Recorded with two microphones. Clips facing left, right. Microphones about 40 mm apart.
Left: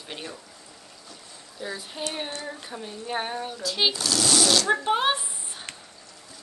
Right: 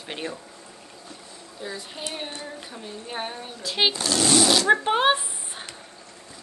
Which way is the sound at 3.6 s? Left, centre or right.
Right.